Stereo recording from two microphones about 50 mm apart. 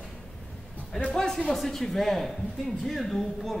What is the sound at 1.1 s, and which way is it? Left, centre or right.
A woman's voice, centre.